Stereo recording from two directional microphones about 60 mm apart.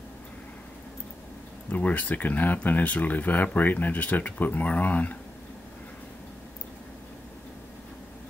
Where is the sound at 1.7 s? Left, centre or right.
Left.